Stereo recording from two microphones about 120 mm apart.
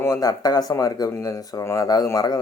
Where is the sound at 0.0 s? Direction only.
30° left (ahead or behind).